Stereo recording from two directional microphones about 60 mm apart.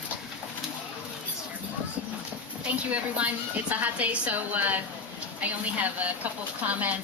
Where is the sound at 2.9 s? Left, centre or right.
Right.